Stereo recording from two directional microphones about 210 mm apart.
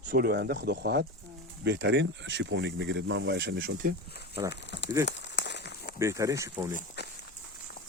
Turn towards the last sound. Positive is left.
turn(degrees=55)  # may be behind; listen again after turning